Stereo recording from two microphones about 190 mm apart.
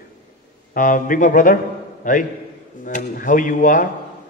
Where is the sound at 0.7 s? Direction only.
45° left (ahead or behind).